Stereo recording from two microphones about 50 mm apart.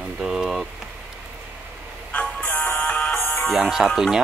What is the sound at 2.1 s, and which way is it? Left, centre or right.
Music, left.